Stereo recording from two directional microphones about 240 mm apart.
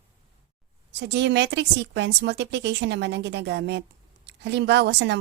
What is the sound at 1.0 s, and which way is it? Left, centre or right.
A woman's voice, right.